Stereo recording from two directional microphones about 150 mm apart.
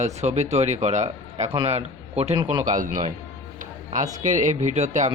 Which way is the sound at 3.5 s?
60° right (ahead or behind).